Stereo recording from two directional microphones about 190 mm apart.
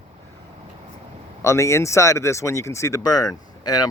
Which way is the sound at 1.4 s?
15° left (ahead or behind).